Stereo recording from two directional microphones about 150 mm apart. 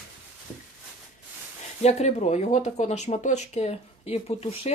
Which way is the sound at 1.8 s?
50° left (ahead or behind).